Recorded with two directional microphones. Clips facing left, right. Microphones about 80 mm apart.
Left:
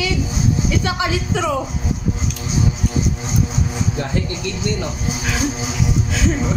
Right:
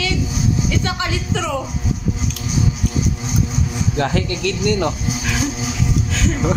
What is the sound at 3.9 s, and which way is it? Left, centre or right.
A man's voice, right.